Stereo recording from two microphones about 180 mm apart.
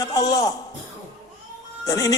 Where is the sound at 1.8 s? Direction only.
20° left (ahead or behind).